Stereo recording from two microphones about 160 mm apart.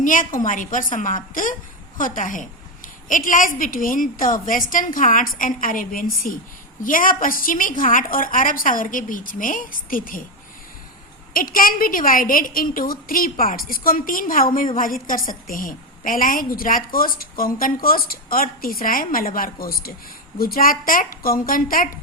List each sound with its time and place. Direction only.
0.0 s a woman's voice: 55° left (ahead or behind)
11.3 s a woman's voice: 65° left (ahead or behind)